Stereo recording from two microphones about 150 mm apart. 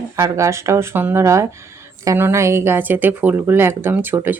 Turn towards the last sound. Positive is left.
turn(degrees=-15)  # may be behind; listen again after turning